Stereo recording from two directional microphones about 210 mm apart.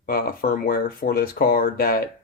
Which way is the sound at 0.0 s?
45° left (ahead or behind).